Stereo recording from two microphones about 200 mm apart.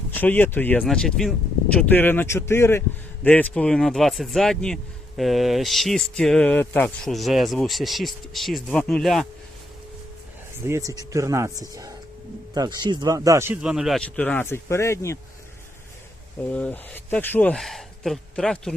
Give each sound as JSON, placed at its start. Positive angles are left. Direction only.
{"t": 0.1, "sound": "speech", "side_deg": 10}
{"t": 10.7, "sound": "speech", "side_deg": -15}
{"t": 16.5, "sound": "speech", "side_deg": 5}